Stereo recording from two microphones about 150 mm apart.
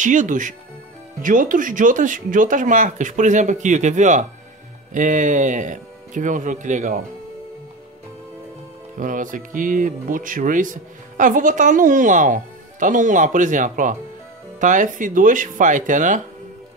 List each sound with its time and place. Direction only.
0.0 s speech: 55° right (ahead or behind)
8.9 s speech: 60° right (ahead or behind)